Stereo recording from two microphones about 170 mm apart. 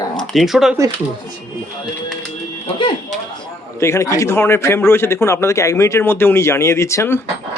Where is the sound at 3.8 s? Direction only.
15° left (ahead or behind).